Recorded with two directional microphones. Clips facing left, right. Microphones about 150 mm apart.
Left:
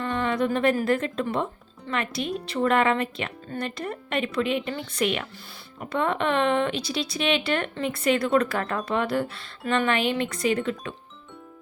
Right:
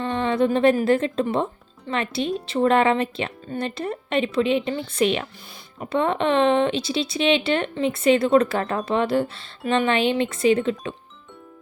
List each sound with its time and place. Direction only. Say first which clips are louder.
0.0 s a woman's voice: right 4 dB; 25° right (ahead or behind)